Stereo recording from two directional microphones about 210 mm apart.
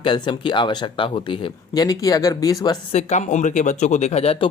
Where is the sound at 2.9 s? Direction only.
30° left (ahead or behind).